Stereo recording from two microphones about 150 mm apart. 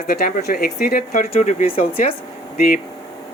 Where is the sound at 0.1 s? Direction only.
80° left.